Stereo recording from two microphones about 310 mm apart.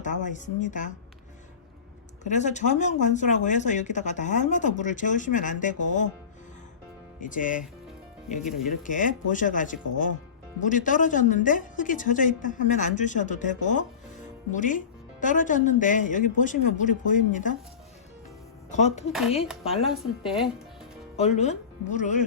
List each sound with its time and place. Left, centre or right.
0.0 s speech: left
2.2 s speech: left
7.2 s speech: left
8.7 s speech: left
18.7 s speech: left
19.7 s a woman's voice: centre
21.2 s speech: left